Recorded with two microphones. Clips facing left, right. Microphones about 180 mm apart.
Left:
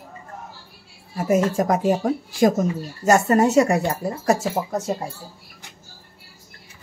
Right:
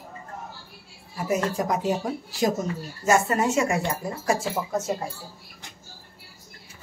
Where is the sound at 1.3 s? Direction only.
50° left (ahead or behind).